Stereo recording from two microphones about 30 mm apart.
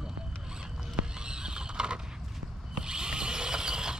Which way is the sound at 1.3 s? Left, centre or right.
Right.